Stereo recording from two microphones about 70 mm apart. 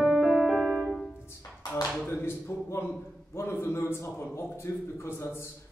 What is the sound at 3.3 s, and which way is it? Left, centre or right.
Speech, left.